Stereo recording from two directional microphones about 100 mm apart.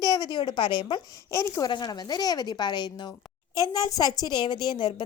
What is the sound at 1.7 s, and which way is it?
A woman's voice, 45° left (ahead or behind).